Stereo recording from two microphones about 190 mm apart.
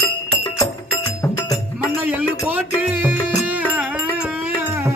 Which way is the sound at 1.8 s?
10° right (ahead or behind).